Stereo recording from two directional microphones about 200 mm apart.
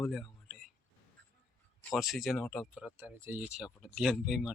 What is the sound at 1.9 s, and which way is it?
Speech, centre (ahead or behind).